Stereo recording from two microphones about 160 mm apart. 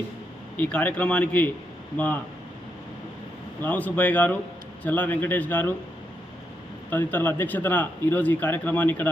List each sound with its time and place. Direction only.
0.5 s speech: 10° left (ahead or behind)
3.6 s speech: 10° left (ahead or behind)
6.9 s speech: 10° left (ahead or behind)